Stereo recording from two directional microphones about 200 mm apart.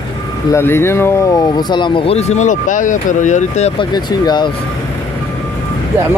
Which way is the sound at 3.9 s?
20° left (ahead or behind).